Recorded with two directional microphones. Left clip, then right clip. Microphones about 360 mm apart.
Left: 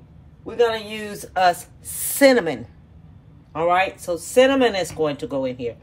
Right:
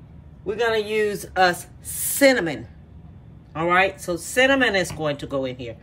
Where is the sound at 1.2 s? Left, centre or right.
Centre.